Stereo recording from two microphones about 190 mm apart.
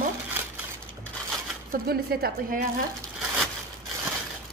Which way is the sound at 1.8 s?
55° right (ahead or behind).